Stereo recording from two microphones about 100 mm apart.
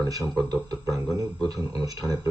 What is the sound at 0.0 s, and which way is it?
Speech, 35° right (ahead or behind).